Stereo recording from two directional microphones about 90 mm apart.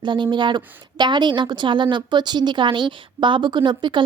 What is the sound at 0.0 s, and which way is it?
A woman's voice, 60° right (ahead or behind).